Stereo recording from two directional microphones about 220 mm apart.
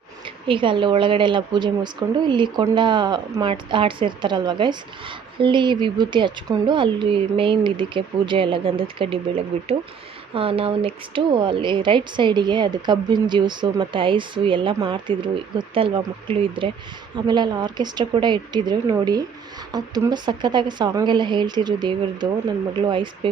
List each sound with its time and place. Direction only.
0.4 s a woman's voice: 25° right (ahead or behind)